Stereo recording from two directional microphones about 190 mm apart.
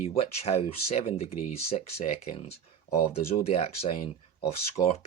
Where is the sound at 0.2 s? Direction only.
30° left (ahead or behind).